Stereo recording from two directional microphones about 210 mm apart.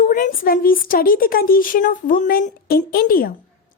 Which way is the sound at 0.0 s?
40° left (ahead or behind).